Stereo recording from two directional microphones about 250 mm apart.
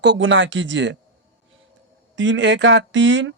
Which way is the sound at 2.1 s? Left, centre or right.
Right.